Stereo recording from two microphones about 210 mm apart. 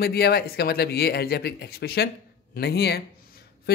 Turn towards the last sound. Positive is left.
turn(degrees=50)  # may be behind; listen again after turning